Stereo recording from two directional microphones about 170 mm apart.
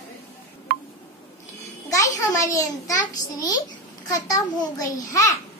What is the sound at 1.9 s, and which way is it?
A child's voice, 20° left (ahead or behind).